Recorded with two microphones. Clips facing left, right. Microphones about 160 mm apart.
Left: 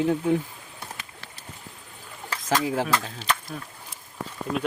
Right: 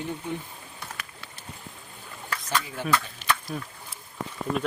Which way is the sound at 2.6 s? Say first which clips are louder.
Left 3 dB; 90° left.